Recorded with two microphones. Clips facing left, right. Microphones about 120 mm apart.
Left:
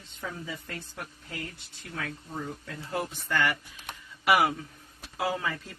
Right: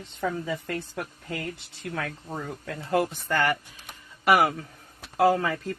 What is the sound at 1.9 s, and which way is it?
Speech, 70° right (ahead or behind).